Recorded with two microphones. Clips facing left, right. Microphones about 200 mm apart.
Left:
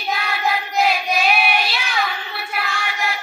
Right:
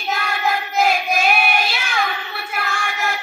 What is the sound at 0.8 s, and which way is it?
Child singing, 50° right (ahead or behind).